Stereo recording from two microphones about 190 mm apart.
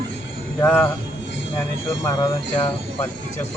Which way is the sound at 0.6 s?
10° left (ahead or behind).